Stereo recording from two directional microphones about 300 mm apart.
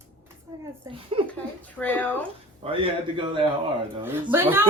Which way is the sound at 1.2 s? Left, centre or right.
Centre.